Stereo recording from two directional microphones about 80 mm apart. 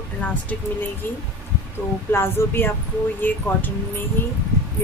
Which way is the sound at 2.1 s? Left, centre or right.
Left.